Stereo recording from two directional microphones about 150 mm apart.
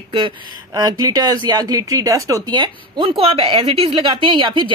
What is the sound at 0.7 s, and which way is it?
Speech, 25° right (ahead or behind).